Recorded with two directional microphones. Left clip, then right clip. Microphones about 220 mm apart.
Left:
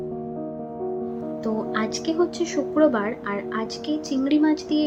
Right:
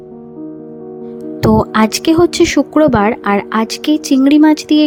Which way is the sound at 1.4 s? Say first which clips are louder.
Right 15 dB; 50° right (ahead or behind).